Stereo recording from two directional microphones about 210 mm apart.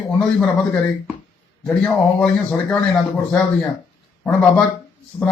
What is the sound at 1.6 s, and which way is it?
Speech, 5° left (ahead or behind).